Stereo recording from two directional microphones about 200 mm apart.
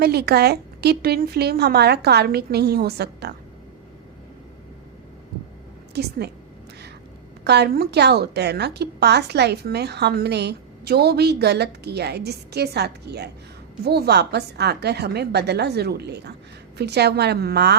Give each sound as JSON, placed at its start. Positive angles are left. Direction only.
{"t": 0.0, "sound": "a woman's voice", "side_deg": -55}
{"t": 5.9, "sound": "a woman's voice", "side_deg": -55}
{"t": 7.4, "sound": "a woman's voice", "side_deg": -55}